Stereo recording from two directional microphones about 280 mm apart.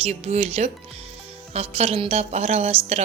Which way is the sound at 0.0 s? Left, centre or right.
Right.